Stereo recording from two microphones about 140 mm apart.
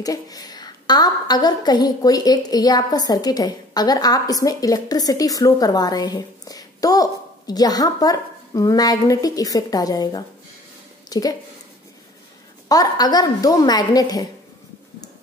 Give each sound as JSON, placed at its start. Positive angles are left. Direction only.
{"t": 0.0, "sound": "a woman's voice", "side_deg": 25}
{"t": 12.6, "sound": "a woman's voice", "side_deg": 25}